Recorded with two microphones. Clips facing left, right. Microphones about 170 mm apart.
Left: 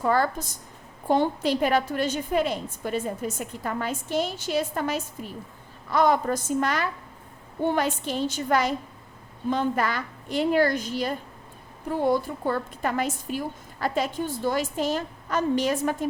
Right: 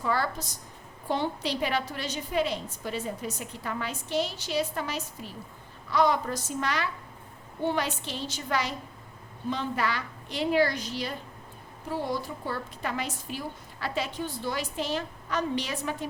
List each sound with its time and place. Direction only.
0.0 s a woman's voice: 50° left (ahead or behind)